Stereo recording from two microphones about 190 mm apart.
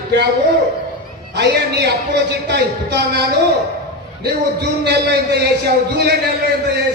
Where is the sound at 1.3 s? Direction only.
60° right (ahead or behind).